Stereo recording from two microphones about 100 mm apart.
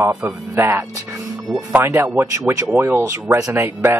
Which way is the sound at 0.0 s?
30° right (ahead or behind).